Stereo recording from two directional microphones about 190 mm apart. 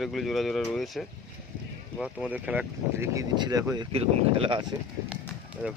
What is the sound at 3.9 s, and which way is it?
Speech, 30° right (ahead or behind).